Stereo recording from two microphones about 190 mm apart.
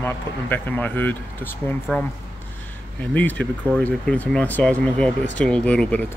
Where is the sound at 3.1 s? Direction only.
10° left (ahead or behind).